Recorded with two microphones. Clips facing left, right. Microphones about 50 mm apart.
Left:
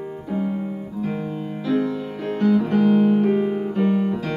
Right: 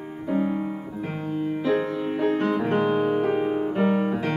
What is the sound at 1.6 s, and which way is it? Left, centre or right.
Music, right.